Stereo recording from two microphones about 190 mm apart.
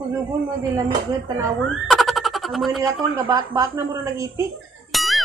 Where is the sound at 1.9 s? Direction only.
Centre (ahead or behind).